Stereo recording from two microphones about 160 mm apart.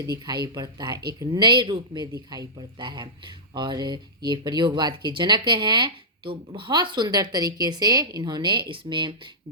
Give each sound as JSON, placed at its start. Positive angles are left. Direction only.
{"t": 0.4, "sound": "speech", "side_deg": -25}